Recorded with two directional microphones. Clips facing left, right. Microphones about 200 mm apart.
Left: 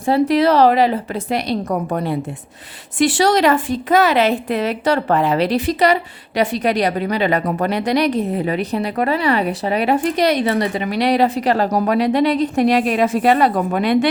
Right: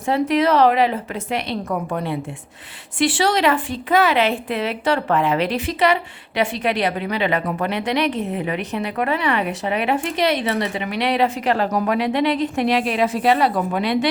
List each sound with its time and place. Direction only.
0.0 s a woman's voice: 35° left (ahead or behind); by 14.1 s 50° left (ahead or behind)